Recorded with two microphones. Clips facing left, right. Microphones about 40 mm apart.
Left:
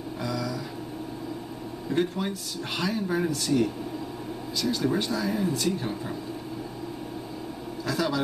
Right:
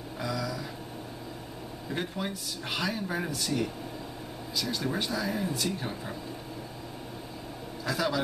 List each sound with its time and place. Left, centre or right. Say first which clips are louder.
0.2 s a sound: left 2 dB; centre
1.9 s speech: left 7 dB; centre
7.8 s a man's voice: left 2 dB; centre